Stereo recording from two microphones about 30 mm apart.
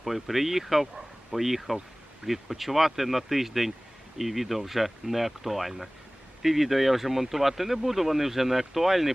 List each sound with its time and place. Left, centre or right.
0.0 s speech: centre